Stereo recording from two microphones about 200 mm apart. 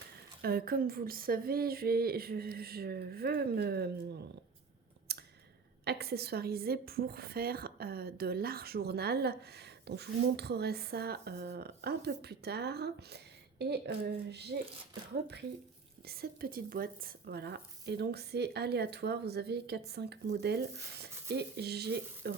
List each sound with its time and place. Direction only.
0.4 s a woman's voice: 50° right (ahead or behind)
5.1 s a sound: 55° right (ahead or behind)
5.8 s a woman's voice: 55° right (ahead or behind)
16.0 s speech: 50° right (ahead or behind)